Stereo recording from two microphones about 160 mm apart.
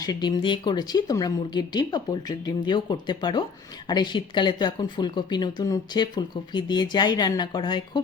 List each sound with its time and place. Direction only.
0.0 s speech: 25° left (ahead or behind)